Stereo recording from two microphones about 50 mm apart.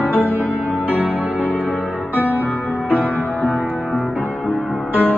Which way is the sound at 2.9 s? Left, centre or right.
Left.